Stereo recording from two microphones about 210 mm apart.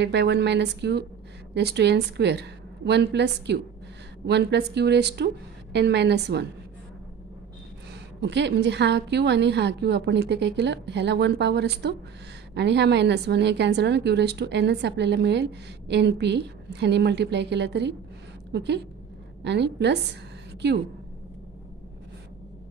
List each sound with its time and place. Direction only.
0.0 s a woman's voice: 55° right (ahead or behind)
8.2 s a woman's voice: 55° right (ahead or behind)